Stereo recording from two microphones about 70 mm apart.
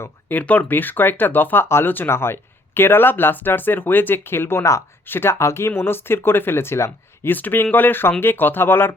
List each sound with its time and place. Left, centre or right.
0.3 s speech: left
7.3 s speech: left